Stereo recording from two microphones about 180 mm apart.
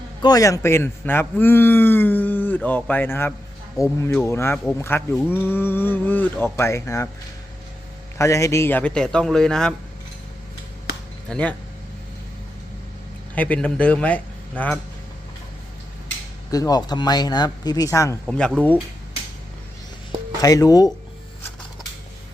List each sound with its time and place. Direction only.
0.2 s speech: 20° left (ahead or behind)
8.2 s a man's voice: 15° left (ahead or behind)
11.3 s speech: 5° left (ahead or behind)
13.3 s a man's voice: 10° left (ahead or behind)
16.5 s speech: 20° left (ahead or behind)
18.3 s a man's voice: 5° left (ahead or behind)
20.4 s speech: 20° left (ahead or behind)